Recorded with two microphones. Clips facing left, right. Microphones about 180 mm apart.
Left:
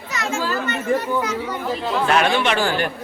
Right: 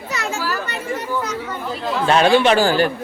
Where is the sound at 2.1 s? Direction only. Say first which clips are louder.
Right 6 dB; 30° right (ahead or behind).